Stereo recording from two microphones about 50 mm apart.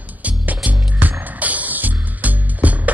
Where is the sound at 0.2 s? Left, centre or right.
Right.